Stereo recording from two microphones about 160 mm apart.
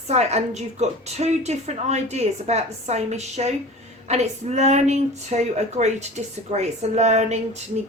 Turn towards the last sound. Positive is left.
turn(degrees=-45)  # may be behind; listen again after turning